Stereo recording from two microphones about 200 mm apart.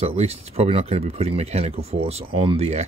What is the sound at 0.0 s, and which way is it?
Speech, 30° right (ahead or behind).